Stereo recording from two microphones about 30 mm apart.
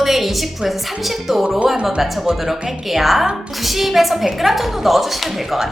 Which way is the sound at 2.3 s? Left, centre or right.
Centre.